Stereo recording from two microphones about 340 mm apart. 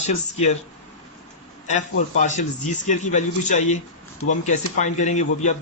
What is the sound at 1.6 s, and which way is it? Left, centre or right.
Speech, left.